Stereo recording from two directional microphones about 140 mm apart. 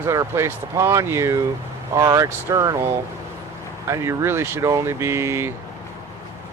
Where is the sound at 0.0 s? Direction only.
20° right (ahead or behind).